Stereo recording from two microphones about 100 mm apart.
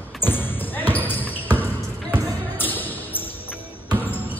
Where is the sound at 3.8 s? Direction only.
20° left (ahead or behind).